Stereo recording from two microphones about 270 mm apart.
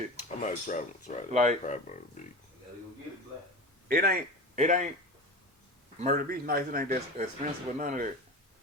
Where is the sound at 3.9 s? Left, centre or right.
Right.